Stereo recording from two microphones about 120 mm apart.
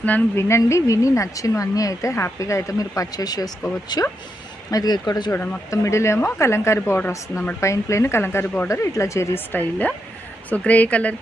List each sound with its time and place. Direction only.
0.0 s a woman's voice: 15° left (ahead or behind); by 5.3 s 35° left (ahead or behind)
5.3 s a woman's voice: 15° left (ahead or behind)